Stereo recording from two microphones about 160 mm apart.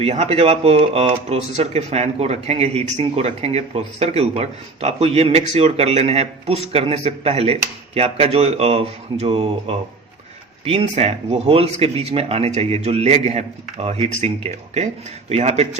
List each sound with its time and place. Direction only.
0.0 s speech: 40° right (ahead or behind)
15.3 s a man's voice: 45° right (ahead or behind)